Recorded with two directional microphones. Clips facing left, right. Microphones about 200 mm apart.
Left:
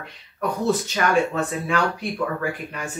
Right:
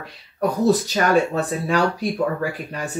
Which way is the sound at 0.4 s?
35° right (ahead or behind).